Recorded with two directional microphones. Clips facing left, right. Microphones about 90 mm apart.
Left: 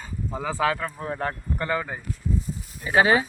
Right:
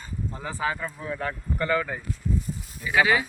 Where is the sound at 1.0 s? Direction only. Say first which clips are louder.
Left 2 dB; 40° left (ahead or behind).